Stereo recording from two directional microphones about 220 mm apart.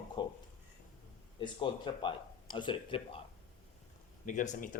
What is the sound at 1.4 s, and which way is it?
Speech, 20° left (ahead or behind).